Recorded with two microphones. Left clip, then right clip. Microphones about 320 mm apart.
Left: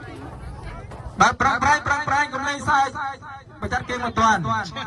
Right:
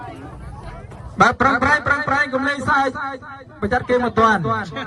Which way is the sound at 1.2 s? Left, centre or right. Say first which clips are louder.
Right 2 dB; centre.